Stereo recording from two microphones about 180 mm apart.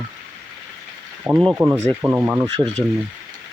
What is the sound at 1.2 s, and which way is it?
Speech, 5° right (ahead or behind).